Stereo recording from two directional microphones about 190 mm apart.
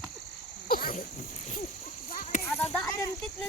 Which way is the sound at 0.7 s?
50° left (ahead or behind).